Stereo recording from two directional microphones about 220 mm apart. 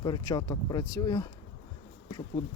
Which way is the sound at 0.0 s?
20° left (ahead or behind).